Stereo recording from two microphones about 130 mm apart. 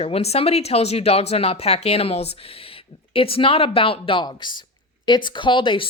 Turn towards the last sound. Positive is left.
turn(degrees=40)  # may be behind; listen again after turning